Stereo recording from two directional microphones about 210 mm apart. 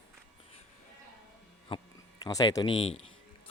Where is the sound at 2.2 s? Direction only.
15° left (ahead or behind).